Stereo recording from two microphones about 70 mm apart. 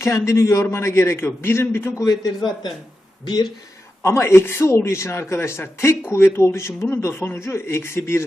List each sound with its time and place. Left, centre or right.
0.0 s a man's voice: left
2.0 s a man's voice: left
4.0 s a man's voice: left